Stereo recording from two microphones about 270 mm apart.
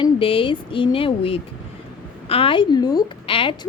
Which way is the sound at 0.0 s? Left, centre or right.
Centre.